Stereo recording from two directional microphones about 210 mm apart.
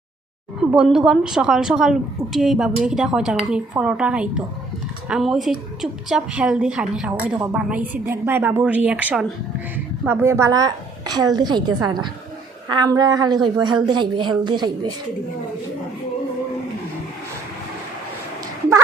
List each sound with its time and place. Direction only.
0.6 s a woman's voice: 5° right (ahead or behind); by 14.7 s 20° right (ahead or behind)